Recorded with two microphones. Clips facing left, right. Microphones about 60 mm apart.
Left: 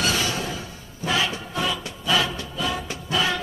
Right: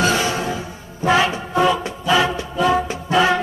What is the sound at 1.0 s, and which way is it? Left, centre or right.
Music, right.